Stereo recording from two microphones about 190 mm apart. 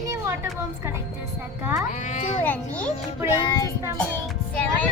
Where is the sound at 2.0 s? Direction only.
40° left (ahead or behind).